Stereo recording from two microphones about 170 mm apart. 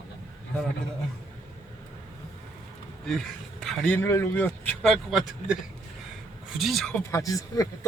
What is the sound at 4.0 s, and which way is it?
Speech, 15° left (ahead or behind).